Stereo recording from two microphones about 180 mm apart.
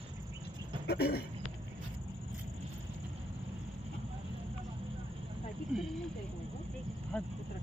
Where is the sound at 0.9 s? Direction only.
65° left (ahead or behind).